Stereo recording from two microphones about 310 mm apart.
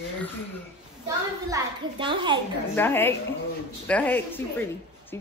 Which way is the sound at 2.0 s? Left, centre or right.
Centre.